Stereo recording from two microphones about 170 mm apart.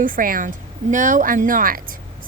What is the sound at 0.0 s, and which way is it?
A woman's voice, 55° right (ahead or behind).